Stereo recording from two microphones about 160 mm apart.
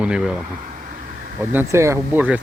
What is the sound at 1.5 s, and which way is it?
Speech, 15° right (ahead or behind).